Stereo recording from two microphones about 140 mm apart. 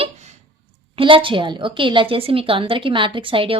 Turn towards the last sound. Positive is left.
turn(degrees=-40)  # may be behind; listen again after turning